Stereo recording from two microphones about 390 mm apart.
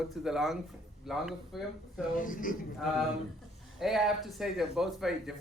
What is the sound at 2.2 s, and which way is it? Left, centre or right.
Speech, left.